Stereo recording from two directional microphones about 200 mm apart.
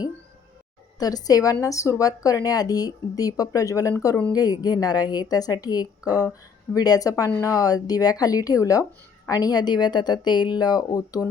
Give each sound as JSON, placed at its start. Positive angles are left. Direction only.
{"t": 0.9, "sound": "a woman's voice", "side_deg": 20}